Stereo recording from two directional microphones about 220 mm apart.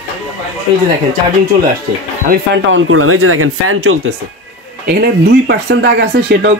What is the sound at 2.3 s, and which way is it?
Speech, 55° right (ahead or behind).